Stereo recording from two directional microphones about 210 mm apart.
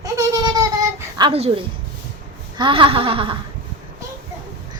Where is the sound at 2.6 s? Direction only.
25° right (ahead or behind).